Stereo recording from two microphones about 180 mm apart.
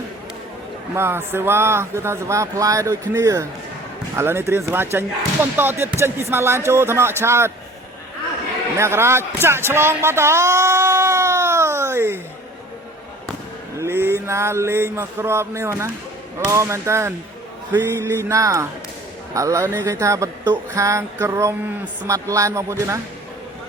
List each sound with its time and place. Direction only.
0.9 s speech: 15° right (ahead or behind)
8.8 s a sound: 15° right (ahead or behind)
13.7 s speech: 15° right (ahead or behind)